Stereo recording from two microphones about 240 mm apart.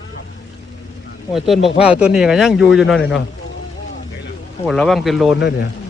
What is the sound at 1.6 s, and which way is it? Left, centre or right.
Speech, left.